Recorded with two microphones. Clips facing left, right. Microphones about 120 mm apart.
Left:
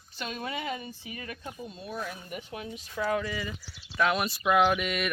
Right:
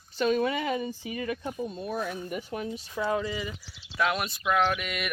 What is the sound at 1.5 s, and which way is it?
Speech, 45° right (ahead or behind).